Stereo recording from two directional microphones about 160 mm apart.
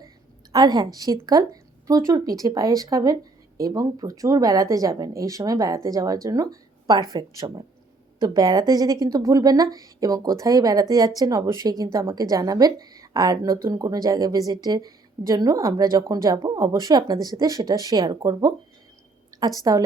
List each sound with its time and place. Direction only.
0.5 s a woman's voice: 25° right (ahead or behind)